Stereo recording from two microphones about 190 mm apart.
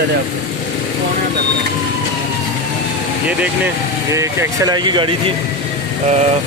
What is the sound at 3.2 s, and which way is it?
Speech, 10° right (ahead or behind).